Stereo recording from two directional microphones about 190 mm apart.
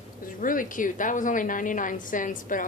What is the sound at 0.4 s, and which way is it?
A woman's voice, 45° left (ahead or behind).